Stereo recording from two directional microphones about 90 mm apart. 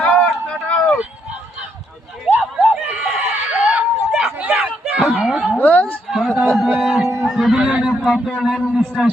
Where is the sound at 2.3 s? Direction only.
20° right (ahead or behind).